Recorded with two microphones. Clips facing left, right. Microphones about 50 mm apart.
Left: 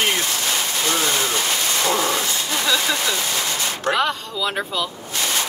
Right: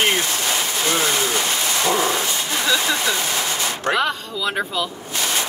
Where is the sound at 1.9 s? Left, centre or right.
Right.